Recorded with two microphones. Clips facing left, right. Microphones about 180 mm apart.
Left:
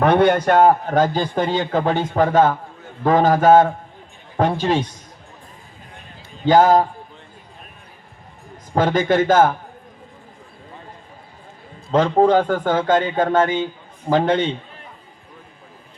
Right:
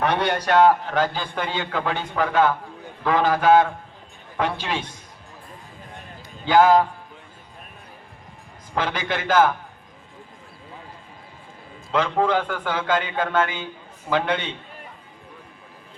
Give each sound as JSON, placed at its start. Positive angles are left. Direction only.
{"t": 0.0, "sound": "a man's voice", "side_deg": 55}
{"t": 6.4, "sound": "a man's voice", "side_deg": 40}
{"t": 8.7, "sound": "a man's voice", "side_deg": 45}
{"t": 11.9, "sound": "a man's voice", "side_deg": 40}